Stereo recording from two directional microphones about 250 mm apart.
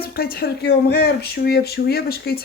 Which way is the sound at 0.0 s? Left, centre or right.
Left.